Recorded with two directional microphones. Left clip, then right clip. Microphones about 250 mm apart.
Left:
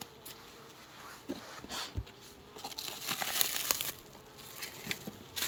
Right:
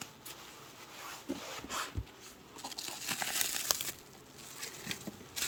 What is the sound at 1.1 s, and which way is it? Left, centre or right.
Dog, right.